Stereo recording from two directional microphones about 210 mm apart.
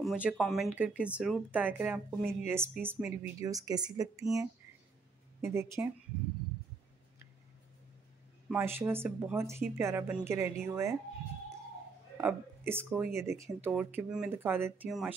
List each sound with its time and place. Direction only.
0.0 s speech: 5° right (ahead or behind)
8.5 s speech: 10° right (ahead or behind)
12.2 s speech: 10° right (ahead or behind)